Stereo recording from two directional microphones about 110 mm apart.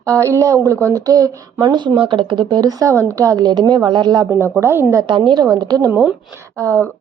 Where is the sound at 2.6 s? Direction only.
30° right (ahead or behind).